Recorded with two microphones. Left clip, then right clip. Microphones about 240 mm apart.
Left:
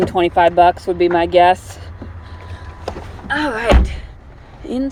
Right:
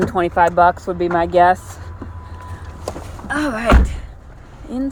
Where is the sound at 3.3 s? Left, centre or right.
Centre.